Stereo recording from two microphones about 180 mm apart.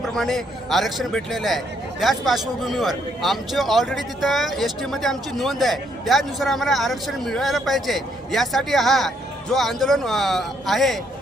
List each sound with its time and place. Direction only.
0.1 s speech: centre (ahead or behind)